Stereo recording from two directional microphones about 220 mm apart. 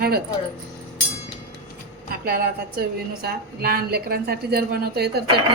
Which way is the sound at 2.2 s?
45° right (ahead or behind).